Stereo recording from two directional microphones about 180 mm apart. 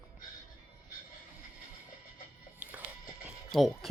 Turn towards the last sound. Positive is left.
turn(degrees=0)  # may be behind; listen again after turning